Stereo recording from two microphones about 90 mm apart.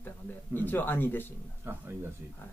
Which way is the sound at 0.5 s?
20° left (ahead or behind).